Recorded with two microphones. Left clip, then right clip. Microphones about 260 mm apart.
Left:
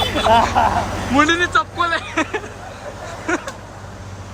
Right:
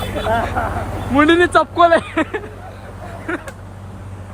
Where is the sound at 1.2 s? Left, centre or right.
Centre.